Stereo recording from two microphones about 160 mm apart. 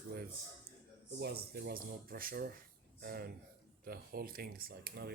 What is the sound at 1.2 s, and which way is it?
Speech, 85° right.